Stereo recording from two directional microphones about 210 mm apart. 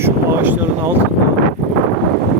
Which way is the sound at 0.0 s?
10° right (ahead or behind).